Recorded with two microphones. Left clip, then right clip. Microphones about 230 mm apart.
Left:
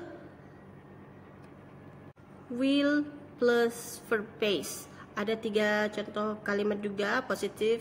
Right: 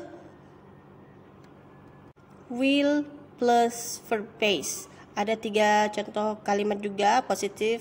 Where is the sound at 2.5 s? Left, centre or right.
Centre.